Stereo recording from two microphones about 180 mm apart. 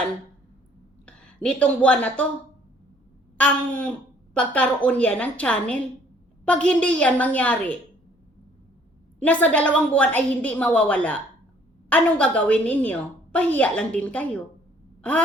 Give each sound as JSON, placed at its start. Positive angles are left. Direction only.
{"t": 1.0, "sound": "speech", "side_deg": 5}
{"t": 3.3, "sound": "a woman's voice", "side_deg": 5}
{"t": 9.2, "sound": "a woman's voice", "side_deg": 10}